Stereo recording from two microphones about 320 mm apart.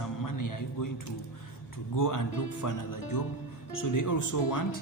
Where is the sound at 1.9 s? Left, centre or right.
Left.